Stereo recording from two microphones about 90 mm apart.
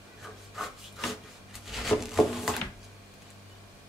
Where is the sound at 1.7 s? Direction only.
Centre (ahead or behind).